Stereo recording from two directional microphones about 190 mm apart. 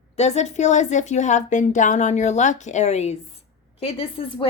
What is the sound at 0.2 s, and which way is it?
A woman's voice, 35° left (ahead or behind).